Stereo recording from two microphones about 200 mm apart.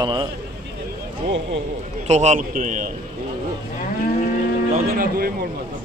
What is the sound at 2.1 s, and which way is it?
Speech, 35° right (ahead or behind).